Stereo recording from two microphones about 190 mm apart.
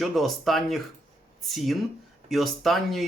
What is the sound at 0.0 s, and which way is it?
Speech, centre (ahead or behind).